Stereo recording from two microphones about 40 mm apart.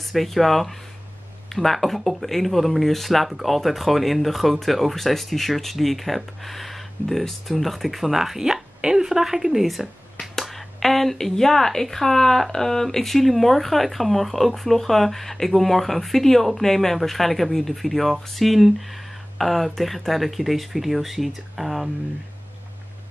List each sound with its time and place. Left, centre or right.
0.1 s speech: centre